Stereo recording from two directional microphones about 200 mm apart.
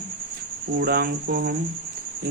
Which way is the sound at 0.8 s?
50° right (ahead or behind).